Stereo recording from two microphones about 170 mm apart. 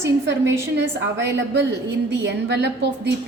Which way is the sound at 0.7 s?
85° right.